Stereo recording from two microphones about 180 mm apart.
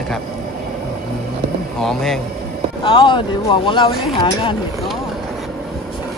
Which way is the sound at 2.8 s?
25° left (ahead or behind).